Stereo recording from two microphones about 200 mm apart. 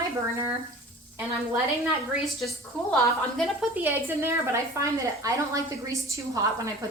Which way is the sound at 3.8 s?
10° right (ahead or behind).